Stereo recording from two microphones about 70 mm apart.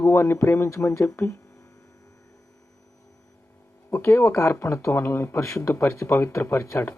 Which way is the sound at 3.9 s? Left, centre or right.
Left.